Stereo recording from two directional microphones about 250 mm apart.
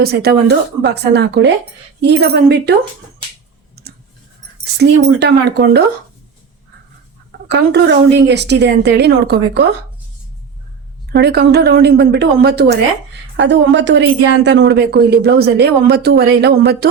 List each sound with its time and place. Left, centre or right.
0.0 s a woman's voice: right
3.8 s a sound: right
5.0 s a woman's voice: right
7.3 s a woman's voice: right
11.1 s a woman's voice: right